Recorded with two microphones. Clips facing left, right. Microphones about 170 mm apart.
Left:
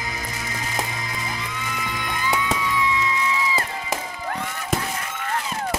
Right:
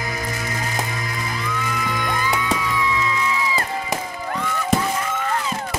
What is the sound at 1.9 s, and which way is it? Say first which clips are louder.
Music: right 1 dB; 50° right (ahead or behind).